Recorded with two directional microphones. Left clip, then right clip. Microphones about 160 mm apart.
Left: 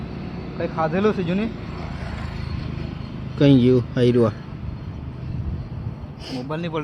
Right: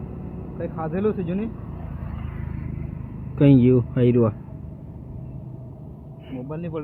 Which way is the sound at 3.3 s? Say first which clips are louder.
Left 1 dB; centre (ahead or behind).